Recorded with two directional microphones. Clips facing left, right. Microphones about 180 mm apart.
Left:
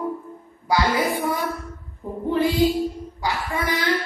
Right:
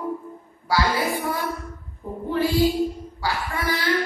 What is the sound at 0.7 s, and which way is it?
Speech, 20° left (ahead or behind).